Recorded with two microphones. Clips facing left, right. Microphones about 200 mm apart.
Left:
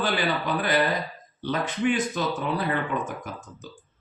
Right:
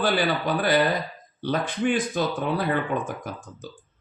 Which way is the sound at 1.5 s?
50° right (ahead or behind).